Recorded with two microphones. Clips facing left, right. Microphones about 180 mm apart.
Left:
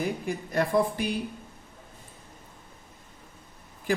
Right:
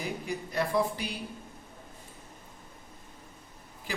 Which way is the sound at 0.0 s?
50° left (ahead or behind).